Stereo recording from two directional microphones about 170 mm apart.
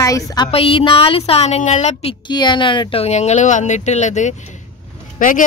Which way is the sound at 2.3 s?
25° left (ahead or behind).